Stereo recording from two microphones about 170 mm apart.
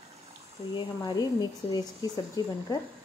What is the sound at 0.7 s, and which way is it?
Speech, 25° left (ahead or behind).